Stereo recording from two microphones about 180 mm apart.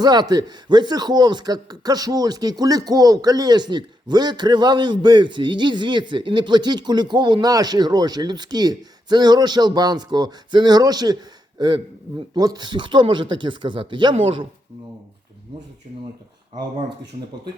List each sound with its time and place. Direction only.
0.0 s speech: 20° right (ahead or behind)